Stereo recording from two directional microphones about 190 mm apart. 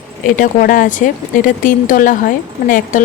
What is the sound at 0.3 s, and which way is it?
Speech, 45° left (ahead or behind).